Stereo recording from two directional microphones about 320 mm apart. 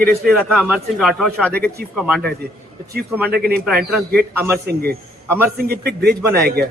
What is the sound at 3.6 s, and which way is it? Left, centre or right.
Speech, centre.